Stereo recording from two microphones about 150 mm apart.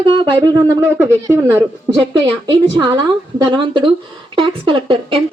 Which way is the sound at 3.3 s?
30° right (ahead or behind).